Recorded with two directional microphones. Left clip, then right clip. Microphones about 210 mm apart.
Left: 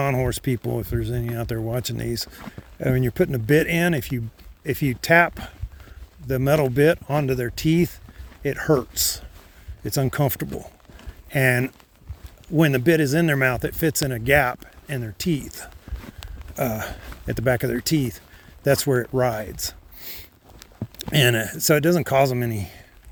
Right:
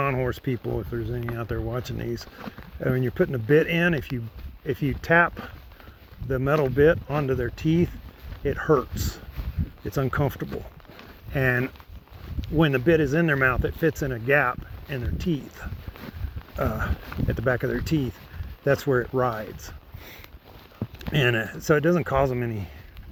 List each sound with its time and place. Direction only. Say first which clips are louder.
0.0 s speech: left 2 dB; 60° left (ahead or behind)
10.0 s speech: left 2 dB; 55° left (ahead or behind)
11.3 s speech: left 4 dB; 50° left (ahead or behind)
21.1 s speech: left 4 dB; 55° left (ahead or behind)